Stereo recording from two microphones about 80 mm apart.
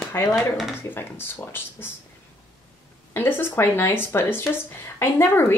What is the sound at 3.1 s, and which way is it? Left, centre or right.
A woman's voice, left.